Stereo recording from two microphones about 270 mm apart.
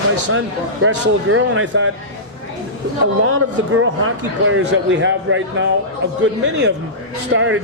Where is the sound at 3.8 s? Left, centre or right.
Right.